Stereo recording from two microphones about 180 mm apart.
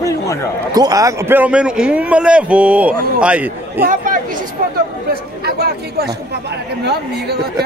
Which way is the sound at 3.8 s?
50° right (ahead or behind).